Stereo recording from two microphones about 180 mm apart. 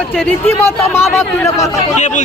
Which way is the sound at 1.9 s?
40° left (ahead or behind).